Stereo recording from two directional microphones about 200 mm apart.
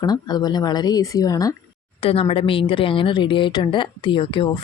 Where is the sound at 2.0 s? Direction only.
30° left (ahead or behind).